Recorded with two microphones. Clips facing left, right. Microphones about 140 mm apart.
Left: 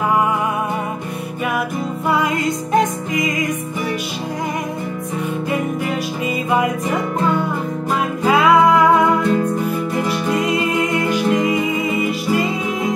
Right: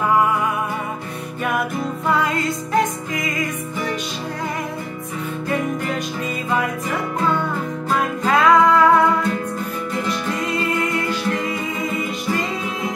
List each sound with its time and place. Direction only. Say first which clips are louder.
2.0 s music: left 2 dB; 15° left (ahead or behind)
8.2 s music: left 2 dB; 10° left (ahead or behind)